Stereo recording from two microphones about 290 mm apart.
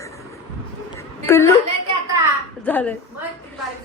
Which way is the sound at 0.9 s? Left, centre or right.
Centre.